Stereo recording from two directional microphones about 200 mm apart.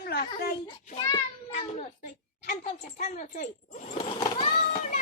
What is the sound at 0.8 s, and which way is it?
Child singing, 30° left (ahead or behind).